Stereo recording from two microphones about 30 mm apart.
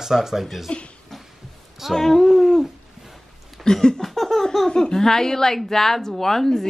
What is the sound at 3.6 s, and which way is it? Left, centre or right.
Speech, left.